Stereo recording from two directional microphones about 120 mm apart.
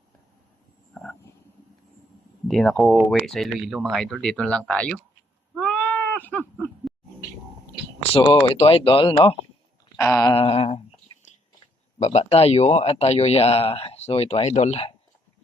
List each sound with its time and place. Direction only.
0.9 s a sound: 5° right (ahead or behind)
2.5 s speech: centre (ahead or behind)
5.6 s sheep: 15° left (ahead or behind)
8.1 s speech: 45° left (ahead or behind)
10.0 s a sound: 25° left (ahead or behind)
10.3 s speech: 55° left (ahead or behind)
12.0 s speech: 60° left (ahead or behind)